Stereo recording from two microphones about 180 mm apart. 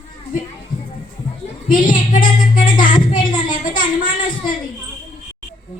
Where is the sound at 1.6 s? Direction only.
50° left (ahead or behind).